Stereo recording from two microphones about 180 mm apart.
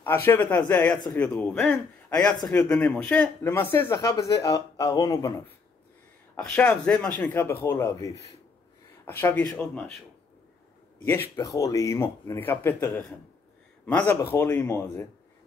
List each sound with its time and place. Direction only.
0.0 s speech: 10° left (ahead or behind)
6.3 s a man's voice: 5° left (ahead or behind)
11.1 s speech: 15° left (ahead or behind)